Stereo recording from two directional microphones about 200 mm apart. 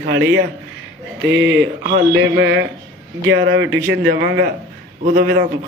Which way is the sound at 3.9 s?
55° right (ahead or behind).